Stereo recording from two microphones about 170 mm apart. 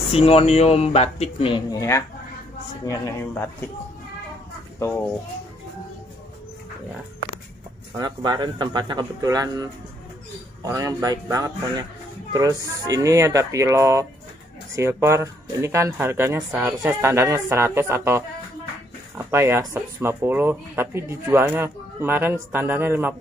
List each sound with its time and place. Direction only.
0.1 s speech: 35° left (ahead or behind); by 3.4 s 15° left (ahead or behind)
8.0 s speech: 25° right (ahead or behind)